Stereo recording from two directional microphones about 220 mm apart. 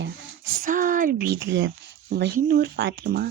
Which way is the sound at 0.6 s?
35° right (ahead or behind).